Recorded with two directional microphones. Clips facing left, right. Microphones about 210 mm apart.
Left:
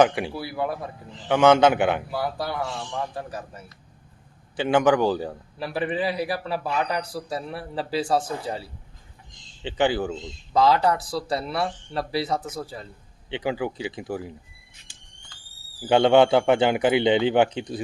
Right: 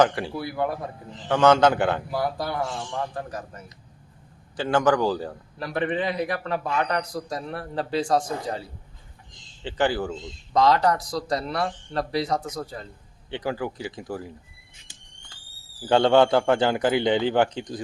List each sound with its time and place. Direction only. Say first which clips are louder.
0.0 s a man's voice: left 1 dB; 15° left (ahead or behind)
0.3 s speech: right 1 dB; 5° left (ahead or behind)
1.3 s a man's voice: left 1 dB; 15° left (ahead or behind)
2.1 s a man's voice: right 1 dB; centre (ahead or behind); by 5.3 s 20° left (ahead or behind)
5.7 s a man's voice: even; 10° left (ahead or behind)
9.6 s a man's voice: left 1 dB; 20° left (ahead or behind)
10.5 s speech: even; 5° left (ahead or behind)
13.3 s a man's voice: left 2 dB; 15° left (ahead or behind)
15.9 s a man's voice: left 1 dB; 15° left (ahead or behind)